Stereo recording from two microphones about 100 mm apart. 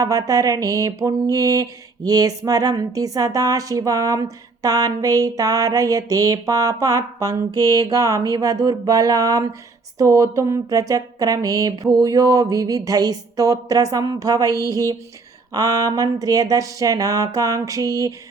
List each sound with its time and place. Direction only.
0.0 s mantra: 35° right (ahead or behind)